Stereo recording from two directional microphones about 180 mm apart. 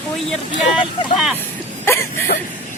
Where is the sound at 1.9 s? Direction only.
15° left (ahead or behind).